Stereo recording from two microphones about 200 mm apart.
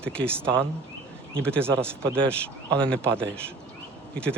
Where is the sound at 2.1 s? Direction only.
5° left (ahead or behind).